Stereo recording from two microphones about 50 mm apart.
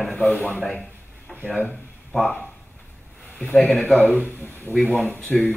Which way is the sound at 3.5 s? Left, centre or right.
Left.